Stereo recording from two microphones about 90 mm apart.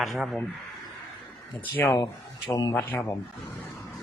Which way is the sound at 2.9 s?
15° left (ahead or behind).